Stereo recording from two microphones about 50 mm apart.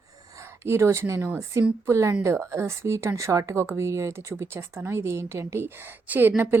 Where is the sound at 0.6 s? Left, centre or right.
Right.